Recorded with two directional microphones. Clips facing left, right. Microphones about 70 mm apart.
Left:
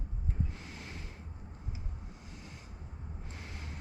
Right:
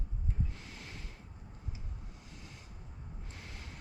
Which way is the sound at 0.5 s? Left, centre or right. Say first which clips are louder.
Left 3 dB; left.